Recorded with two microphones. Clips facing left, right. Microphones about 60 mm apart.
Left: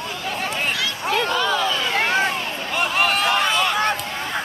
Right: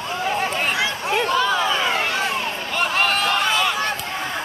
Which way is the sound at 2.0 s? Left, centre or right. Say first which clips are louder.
Left 3 dB; left.